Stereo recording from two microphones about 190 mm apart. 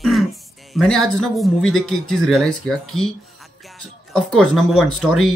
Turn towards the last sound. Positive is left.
turn(degrees=0)  # may be behind; listen again after turning